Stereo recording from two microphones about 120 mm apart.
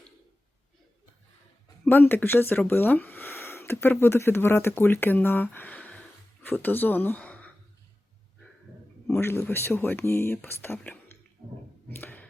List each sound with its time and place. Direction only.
1.8 s speech: 15° left (ahead or behind)
9.2 s speech: 20° left (ahead or behind)
11.9 s a sound: 15° left (ahead or behind)